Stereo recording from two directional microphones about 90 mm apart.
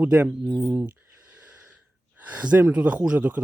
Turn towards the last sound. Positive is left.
turn(degrees=-15)  # may be behind; listen again after turning